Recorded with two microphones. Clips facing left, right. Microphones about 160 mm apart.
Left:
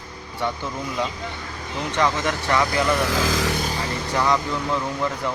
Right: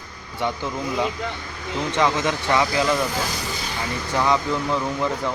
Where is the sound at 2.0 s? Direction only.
15° right (ahead or behind).